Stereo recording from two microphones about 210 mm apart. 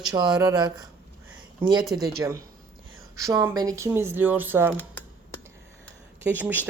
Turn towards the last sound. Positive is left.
turn(degrees=-10)  # may be behind; listen again after turning